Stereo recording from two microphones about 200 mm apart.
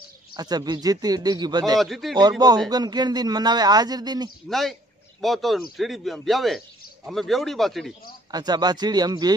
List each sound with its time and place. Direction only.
0.3 s a man's voice: 20° right (ahead or behind)
1.8 s speech: centre (ahead or behind)
2.1 s a man's voice: 20° right (ahead or behind)
4.5 s speech: centre (ahead or behind)
8.3 s a man's voice: 20° right (ahead or behind)